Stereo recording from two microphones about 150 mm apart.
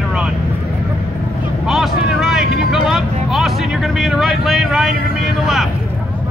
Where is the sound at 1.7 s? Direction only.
Centre (ahead or behind).